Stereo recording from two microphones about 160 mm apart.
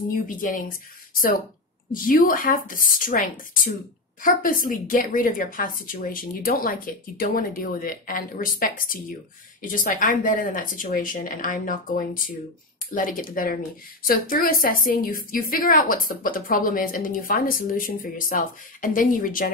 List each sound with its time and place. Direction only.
0.3 s a woman's voice: 55° left (ahead or behind)
1.9 s a woman's voice: 60° left (ahead or behind)